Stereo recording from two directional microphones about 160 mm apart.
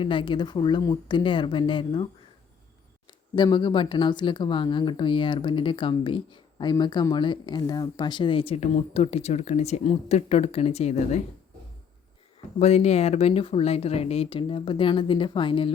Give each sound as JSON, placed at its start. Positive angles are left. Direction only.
{"t": 0.0, "sound": "speech", "side_deg": 30}
{"t": 3.1, "sound": "speech", "side_deg": 30}
{"t": 12.5, "sound": "speech", "side_deg": 40}